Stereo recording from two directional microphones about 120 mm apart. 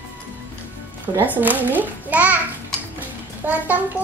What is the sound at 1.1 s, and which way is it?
A child's voice, 15° right (ahead or behind).